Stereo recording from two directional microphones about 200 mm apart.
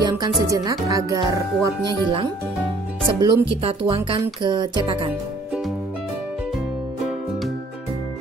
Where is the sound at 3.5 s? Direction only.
30° right (ahead or behind).